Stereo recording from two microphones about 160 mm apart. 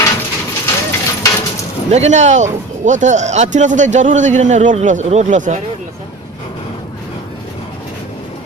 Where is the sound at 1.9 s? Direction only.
45° right (ahead or behind).